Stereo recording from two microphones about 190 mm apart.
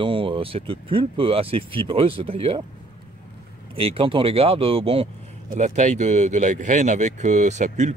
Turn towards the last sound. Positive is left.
turn(degrees=-40)  # may be behind; listen again after turning